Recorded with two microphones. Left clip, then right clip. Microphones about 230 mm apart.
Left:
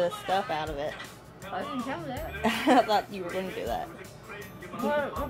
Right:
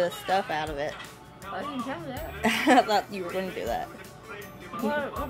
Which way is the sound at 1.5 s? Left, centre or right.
Centre.